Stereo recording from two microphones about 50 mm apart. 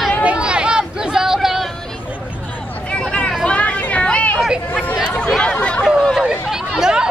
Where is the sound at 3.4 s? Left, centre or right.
Left.